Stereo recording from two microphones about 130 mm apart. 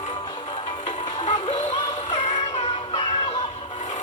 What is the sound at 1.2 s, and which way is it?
Music, 65° left (ahead or behind).